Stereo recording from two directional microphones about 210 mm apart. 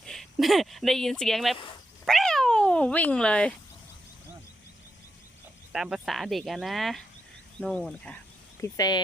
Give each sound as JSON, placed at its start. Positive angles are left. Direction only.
{"t": 0.0, "sound": "speech", "side_deg": 0}
{"t": 1.5, "sound": "speech", "side_deg": 25}
{"t": 2.0, "sound": "speech", "side_deg": 0}
{"t": 5.7, "sound": "speech", "side_deg": 0}
{"t": 8.6, "sound": "speech", "side_deg": 15}